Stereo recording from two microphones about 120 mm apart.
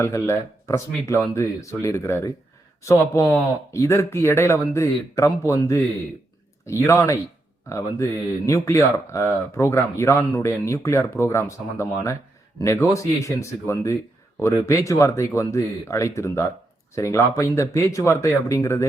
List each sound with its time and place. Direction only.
0.0 s a man's voice: 25° left (ahead or behind)